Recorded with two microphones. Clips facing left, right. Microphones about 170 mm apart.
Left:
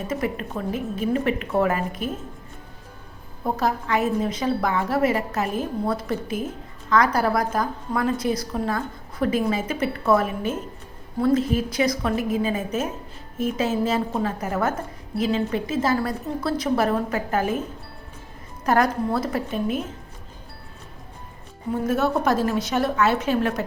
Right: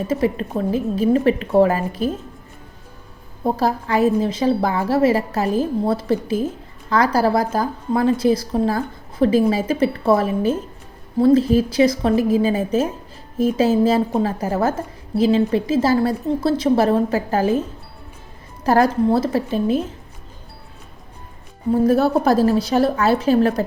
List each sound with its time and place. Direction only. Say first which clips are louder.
0.1 s a woman's voice: right 6 dB; 30° right (ahead or behind)
3.4 s a woman's voice: right 4 dB; 30° right (ahead or behind)
18.6 s a woman's voice: right 5 dB; 30° right (ahead or behind)
21.8 s a woman's voice: right 4 dB; 35° right (ahead or behind)